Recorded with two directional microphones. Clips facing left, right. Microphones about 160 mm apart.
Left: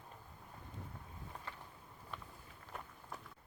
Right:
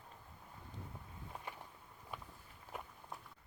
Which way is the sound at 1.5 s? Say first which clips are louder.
Right 3 dB; 15° right (ahead or behind).